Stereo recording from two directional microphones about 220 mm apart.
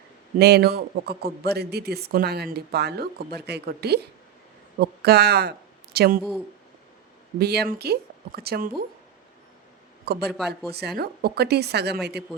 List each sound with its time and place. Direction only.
0.3 s speech: 50° right (ahead or behind)
7.3 s speech: 45° right (ahead or behind)
10.1 s speech: 45° right (ahead or behind)
10.3 s speech: centre (ahead or behind)
10.7 s speech: 45° right (ahead or behind)